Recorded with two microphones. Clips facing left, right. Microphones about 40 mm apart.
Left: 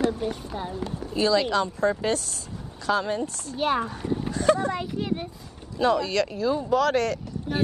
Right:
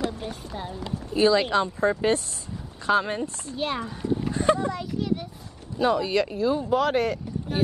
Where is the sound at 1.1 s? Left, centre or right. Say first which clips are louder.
Right 2 dB; right.